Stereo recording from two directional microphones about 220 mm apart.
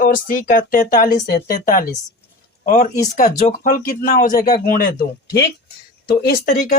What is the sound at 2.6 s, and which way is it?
Speech, 40° left (ahead or behind).